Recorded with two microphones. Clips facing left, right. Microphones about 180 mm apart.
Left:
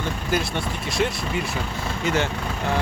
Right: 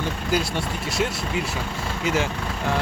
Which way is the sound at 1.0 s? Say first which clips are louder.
Left 2 dB; centre (ahead or behind).